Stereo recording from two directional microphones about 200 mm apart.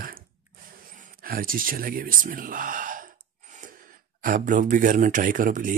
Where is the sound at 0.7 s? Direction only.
45° right (ahead or behind).